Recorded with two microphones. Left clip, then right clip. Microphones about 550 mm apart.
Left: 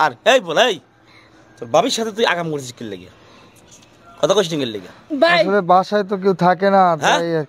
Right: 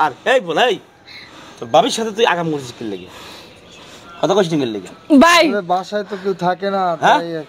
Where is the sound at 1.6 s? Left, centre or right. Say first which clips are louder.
Right 2 dB; centre; by 2.6 s left.